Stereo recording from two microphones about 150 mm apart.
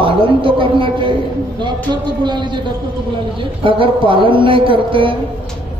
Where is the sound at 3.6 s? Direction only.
35° right (ahead or behind).